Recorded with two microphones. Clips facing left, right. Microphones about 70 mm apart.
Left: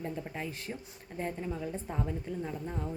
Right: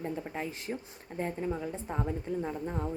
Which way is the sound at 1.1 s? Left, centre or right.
Right.